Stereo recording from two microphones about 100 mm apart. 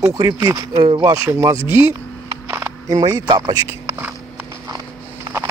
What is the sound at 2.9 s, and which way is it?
Speech, 40° right (ahead or behind).